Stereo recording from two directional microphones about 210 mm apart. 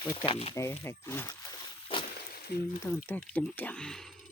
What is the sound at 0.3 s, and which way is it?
Speech, 30° left (ahead or behind).